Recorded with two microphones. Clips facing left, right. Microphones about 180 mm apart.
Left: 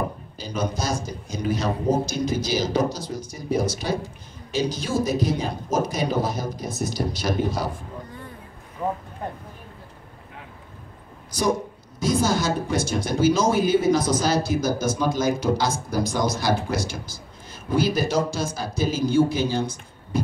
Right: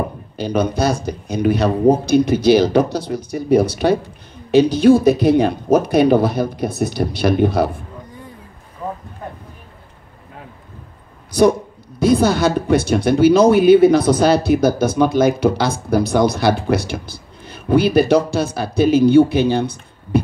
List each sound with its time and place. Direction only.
0.4 s speech: 65° right (ahead or behind)
8.8 s boat: 20° left (ahead or behind)
11.3 s speech: 60° right (ahead or behind)